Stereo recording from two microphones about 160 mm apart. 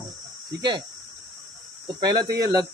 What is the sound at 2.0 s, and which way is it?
Speech, 25° right (ahead or behind).